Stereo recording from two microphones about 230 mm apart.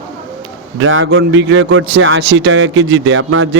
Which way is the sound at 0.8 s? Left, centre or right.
Right.